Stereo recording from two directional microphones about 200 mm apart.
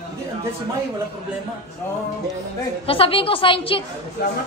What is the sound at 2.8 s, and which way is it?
A woman's voice, 25° left (ahead or behind).